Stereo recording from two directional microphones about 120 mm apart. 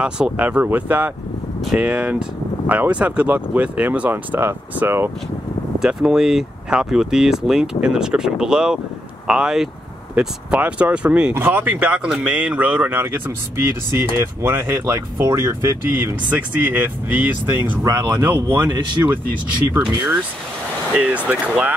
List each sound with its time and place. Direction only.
0.0 s speech: 10° right (ahead or behind)
5.8 s speech: 5° right (ahead or behind)
14.2 s speech: 20° right (ahead or behind)
17.8 s speech: 30° right (ahead or behind)
19.9 s speech: 15° right (ahead or behind)